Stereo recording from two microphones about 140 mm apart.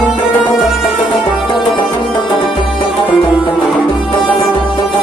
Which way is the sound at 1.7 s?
35° left (ahead or behind).